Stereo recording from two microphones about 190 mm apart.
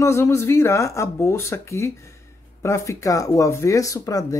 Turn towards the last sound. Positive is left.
turn(degrees=20)  # may be behind; listen again after turning